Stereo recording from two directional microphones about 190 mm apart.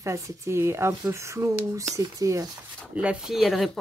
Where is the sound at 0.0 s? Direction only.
15° right (ahead or behind).